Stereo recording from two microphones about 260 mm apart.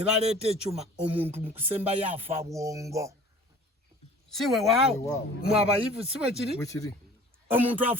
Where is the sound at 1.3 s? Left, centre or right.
Centre.